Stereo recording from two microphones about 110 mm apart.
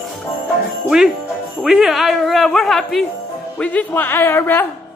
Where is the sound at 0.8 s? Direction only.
5° right (ahead or behind).